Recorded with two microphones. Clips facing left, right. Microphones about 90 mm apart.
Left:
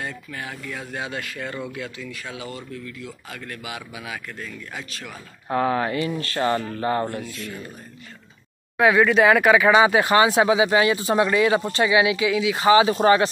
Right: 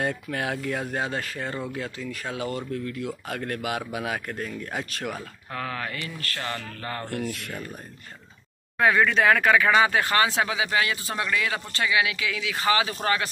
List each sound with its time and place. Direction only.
0.0 s speech: 55° right (ahead or behind)
5.5 s speech: 25° left (ahead or behind)
7.2 s speech: 65° right (ahead or behind)
8.7 s speech: 5° left (ahead or behind); by 13.3 s 25° left (ahead or behind)